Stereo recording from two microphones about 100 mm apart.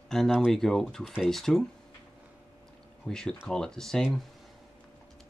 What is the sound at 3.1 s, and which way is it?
Speech, 5° left (ahead or behind).